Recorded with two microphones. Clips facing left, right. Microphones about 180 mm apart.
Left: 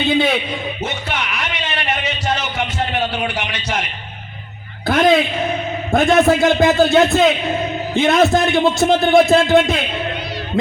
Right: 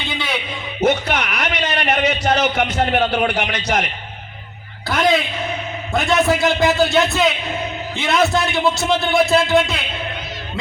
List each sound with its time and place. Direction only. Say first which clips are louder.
0.0 s a man's voice: left 10 dB; 50° left (ahead or behind)
0.9 s speech: right 7 dB; 40° right (ahead or behind)
1.4 s a sound: right 3 dB; 40° right (ahead or behind)
3.4 s a man's voice: right 3 dB; 40° right (ahead or behind)
4.9 s a man's voice: left 4 dB; 50° left (ahead or behind)